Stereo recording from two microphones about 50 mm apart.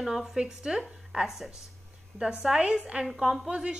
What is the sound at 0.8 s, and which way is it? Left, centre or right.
A woman's voice, centre.